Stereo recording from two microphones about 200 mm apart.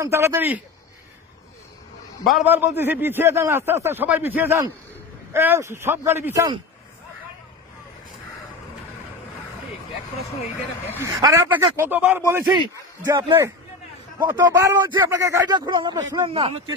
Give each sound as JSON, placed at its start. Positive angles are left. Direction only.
{"t": 0.0, "sound": "a man's voice", "side_deg": -15}
{"t": 2.2, "sound": "a man's voice", "side_deg": -5}
{"t": 11.0, "sound": "a man's voice", "side_deg": -20}